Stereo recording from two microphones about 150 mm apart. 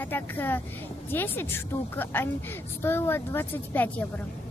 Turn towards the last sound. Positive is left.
turn(degrees=10)  # may be behind; listen again after turning